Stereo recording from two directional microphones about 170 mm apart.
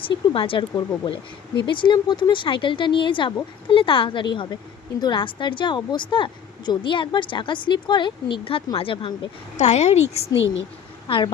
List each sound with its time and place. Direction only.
0.3 s a woman's voice: 30° left (ahead or behind)
10.2 s speech: 90° left